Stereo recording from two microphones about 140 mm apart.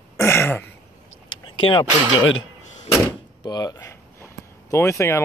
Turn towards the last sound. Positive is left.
turn(degrees=20)  # may be behind; listen again after turning